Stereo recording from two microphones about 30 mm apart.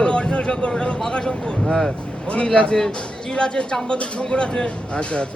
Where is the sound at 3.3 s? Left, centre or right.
Left.